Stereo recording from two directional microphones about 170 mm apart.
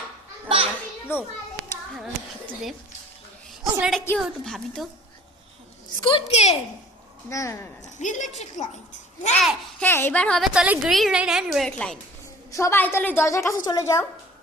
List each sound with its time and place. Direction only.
0.4 s children playing: 35° right (ahead or behind)
1.1 s a woman's voice: 15° left (ahead or behind)
3.5 s a woman's voice: centre (ahead or behind)
6.0 s a woman's voice: 30° left (ahead or behind)
7.3 s a woman's voice: 15° left (ahead or behind)
7.9 s a woman's voice: 45° left (ahead or behind)
9.8 s a woman's voice: 10° left (ahead or behind)
12.5 s a woman's voice: 15° left (ahead or behind)